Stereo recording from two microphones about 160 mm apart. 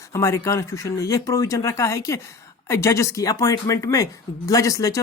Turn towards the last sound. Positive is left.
turn(degrees=20)  # may be behind; listen again after turning